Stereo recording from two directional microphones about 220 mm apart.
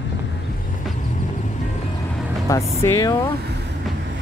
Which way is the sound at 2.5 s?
15° left (ahead or behind).